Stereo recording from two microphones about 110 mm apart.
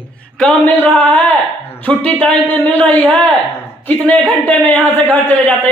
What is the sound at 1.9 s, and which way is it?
Speech, 15° left (ahead or behind).